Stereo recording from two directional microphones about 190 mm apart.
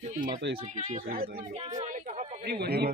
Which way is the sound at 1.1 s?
50° right (ahead or behind).